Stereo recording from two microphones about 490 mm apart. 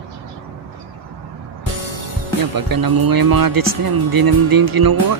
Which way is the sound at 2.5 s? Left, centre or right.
Right.